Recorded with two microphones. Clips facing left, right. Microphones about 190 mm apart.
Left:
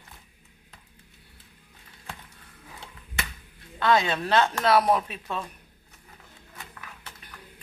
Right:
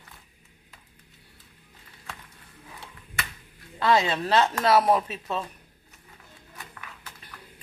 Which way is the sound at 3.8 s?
5° right (ahead or behind).